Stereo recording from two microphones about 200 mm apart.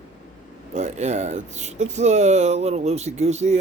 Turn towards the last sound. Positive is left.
turn(degrees=-35)  # may be behind; listen again after turning